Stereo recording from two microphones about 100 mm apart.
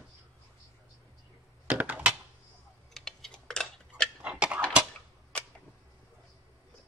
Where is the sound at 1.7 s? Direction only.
15° right (ahead or behind).